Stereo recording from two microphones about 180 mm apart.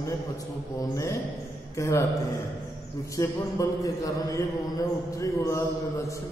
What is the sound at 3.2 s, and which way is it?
A man's voice, 20° left (ahead or behind).